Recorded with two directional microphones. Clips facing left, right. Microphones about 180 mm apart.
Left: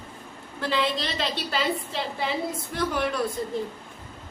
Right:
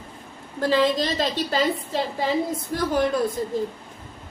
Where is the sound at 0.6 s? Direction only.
40° right (ahead or behind).